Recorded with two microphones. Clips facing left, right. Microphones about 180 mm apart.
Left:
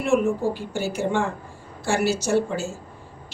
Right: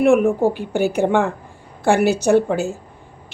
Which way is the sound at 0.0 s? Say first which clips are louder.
Right 7 dB; 60° right (ahead or behind).